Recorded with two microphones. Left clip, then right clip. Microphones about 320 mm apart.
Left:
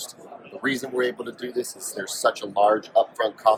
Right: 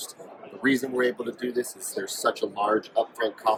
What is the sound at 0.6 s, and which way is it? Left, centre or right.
Speech, centre.